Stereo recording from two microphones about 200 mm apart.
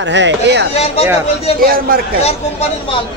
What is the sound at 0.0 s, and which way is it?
Speech, 65° right (ahead or behind).